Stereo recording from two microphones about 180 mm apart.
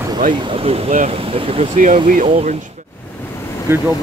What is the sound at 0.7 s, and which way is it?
Speech, 40° right (ahead or behind).